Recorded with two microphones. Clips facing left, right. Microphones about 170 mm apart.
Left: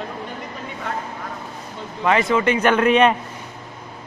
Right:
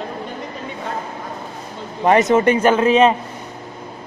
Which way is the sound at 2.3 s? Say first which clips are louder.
Right 4 dB; 45° right (ahead or behind).